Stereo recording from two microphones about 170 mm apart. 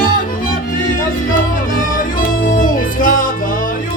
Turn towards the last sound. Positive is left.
turn(degrees=55)  # may be behind; listen again after turning